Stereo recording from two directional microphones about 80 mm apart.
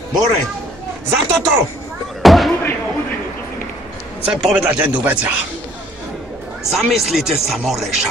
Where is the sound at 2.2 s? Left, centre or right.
Centre.